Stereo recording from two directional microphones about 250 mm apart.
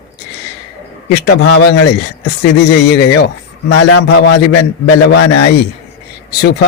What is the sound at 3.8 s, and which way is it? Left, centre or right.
Speech, left.